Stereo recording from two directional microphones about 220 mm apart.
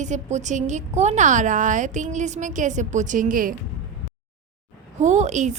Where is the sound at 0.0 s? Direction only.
30° right (ahead or behind).